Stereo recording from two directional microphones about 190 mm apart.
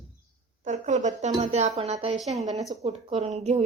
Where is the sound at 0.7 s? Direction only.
40° right (ahead or behind).